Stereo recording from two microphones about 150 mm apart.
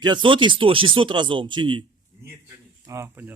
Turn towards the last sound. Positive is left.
turn(degrees=-15)  # may be behind; listen again after turning